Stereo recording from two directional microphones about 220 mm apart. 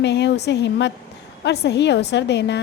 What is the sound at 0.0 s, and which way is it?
A woman's voice, 50° left (ahead or behind).